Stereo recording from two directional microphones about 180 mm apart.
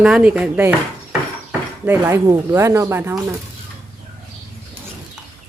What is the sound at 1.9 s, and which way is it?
A woman's voice, 15° right (ahead or behind).